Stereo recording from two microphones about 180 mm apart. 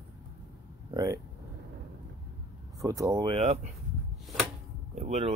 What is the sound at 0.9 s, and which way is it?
Vehicle, 20° right (ahead or behind).